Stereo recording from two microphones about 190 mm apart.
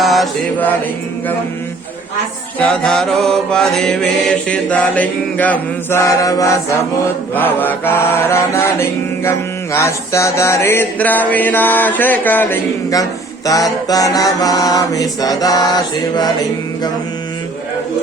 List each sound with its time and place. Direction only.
0.0 s mantra: centre (ahead or behind)
2.6 s mantra: centre (ahead or behind)
7.3 s a sound: 10° left (ahead or behind)
13.8 s mantra: 20° left (ahead or behind)